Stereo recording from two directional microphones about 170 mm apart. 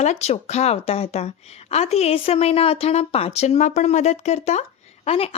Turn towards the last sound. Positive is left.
turn(degrees=35)  # may be behind; listen again after turning